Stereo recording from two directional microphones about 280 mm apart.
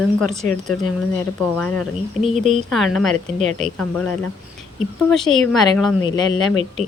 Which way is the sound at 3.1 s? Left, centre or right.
Right.